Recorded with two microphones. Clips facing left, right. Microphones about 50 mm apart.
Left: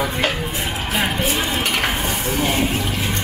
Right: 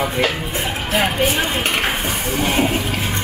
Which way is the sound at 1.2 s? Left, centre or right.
Centre.